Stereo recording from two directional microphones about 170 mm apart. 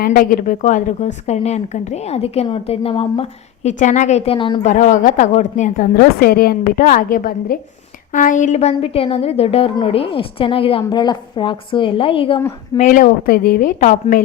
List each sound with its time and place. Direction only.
0.0 s a woman's voice: 55° left (ahead or behind); by 4.6 s 30° left (ahead or behind)
4.6 s a woman's voice: 45° left (ahead or behind)
12.7 s a woman's voice: 50° left (ahead or behind)